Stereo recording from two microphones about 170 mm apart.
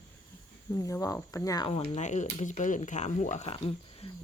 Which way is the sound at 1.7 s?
40° left (ahead or behind).